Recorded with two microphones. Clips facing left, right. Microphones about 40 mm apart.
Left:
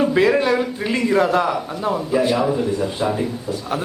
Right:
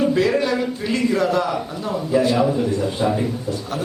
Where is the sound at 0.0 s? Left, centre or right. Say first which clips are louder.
Left 2 dB; left.